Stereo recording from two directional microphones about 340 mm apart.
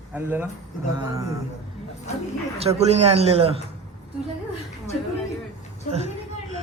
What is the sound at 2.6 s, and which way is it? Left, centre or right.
A man's voice, centre.